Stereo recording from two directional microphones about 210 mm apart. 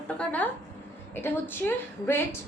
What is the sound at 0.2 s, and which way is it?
A woman's voice, 5° left (ahead or behind).